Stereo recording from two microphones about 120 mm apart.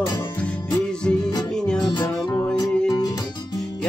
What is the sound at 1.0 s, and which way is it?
Music, 10° left (ahead or behind).